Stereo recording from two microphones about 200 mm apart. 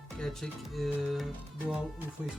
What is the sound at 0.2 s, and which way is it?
Speech, centre (ahead or behind).